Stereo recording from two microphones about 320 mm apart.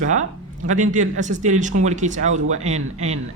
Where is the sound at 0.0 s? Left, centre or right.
Right.